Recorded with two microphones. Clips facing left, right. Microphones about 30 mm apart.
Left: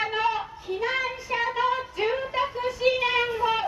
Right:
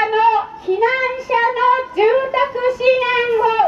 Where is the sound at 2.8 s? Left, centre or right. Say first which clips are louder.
Right 7 dB; right.